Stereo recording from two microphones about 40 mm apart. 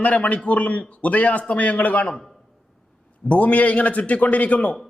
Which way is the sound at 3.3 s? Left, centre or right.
Left.